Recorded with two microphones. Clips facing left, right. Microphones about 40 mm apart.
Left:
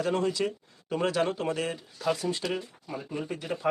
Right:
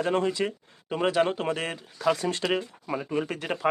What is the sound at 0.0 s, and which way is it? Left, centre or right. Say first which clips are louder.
Speech: right 2 dB; right.